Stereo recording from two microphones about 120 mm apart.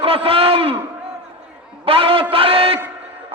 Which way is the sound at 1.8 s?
50° right (ahead or behind).